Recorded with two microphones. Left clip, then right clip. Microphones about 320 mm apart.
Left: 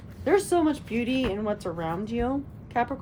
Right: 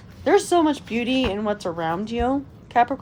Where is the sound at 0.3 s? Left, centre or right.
Right.